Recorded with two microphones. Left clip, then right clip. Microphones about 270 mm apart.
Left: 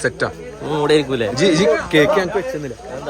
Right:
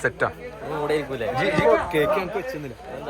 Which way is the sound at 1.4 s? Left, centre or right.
Centre.